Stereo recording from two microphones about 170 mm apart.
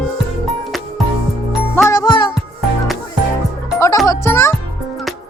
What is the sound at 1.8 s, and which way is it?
Music, 20° left (ahead or behind).